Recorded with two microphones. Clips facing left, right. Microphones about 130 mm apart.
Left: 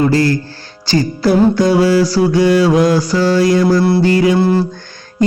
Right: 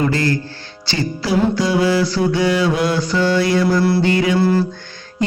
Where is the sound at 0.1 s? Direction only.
35° left (ahead or behind).